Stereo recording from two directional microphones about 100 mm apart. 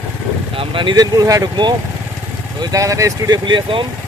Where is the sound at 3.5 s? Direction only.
55° right (ahead or behind).